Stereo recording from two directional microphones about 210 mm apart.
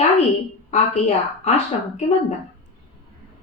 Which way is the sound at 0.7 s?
30° left (ahead or behind).